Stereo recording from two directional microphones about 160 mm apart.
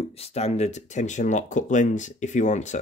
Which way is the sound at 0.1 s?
40° left (ahead or behind).